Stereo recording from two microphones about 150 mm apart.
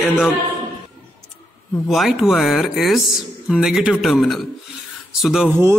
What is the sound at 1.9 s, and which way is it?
Speech, centre (ahead or behind).